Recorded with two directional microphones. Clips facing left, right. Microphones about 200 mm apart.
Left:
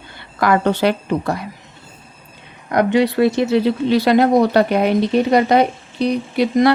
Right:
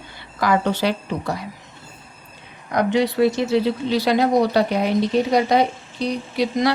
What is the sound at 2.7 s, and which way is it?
A woman's voice, 60° left (ahead or behind).